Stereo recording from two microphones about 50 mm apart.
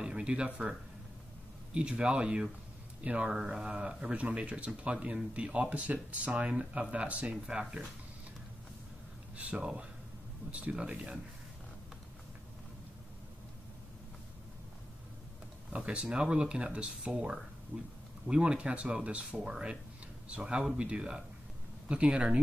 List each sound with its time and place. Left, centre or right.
0.0 s a sound: right
1.7 s speech: centre
3.3 s speech: centre
7.4 s speech: centre
9.4 s speech: right
15.7 s speech: right